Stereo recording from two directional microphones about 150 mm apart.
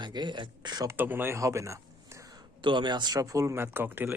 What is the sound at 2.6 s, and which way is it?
Speech, 30° right (ahead or behind).